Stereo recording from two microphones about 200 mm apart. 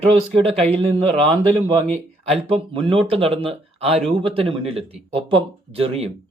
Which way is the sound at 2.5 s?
25° right (ahead or behind).